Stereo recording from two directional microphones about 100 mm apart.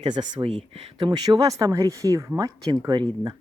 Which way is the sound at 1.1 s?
45° right (ahead or behind).